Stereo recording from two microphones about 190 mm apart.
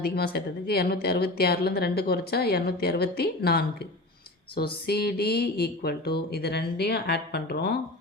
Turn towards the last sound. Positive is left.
turn(degrees=60)  # may be behind; listen again after turning